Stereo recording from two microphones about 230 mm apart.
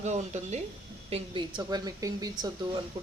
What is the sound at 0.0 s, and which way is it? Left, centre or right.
A woman's voice, right.